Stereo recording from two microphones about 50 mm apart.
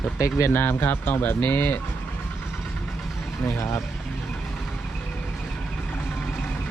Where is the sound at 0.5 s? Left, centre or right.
Left.